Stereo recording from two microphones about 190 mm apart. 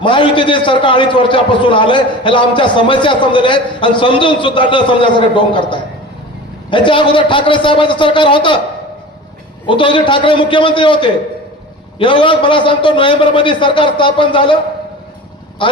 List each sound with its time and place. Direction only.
0.0 s a man's voice: 25° left (ahead or behind)
9.6 s a man's voice: 25° left (ahead or behind)
15.6 s speech: 25° left (ahead or behind)